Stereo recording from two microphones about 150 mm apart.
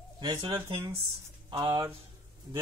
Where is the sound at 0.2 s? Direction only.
30° right (ahead or behind).